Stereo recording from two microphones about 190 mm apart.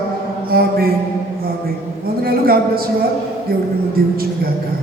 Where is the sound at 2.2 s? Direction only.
50° right (ahead or behind).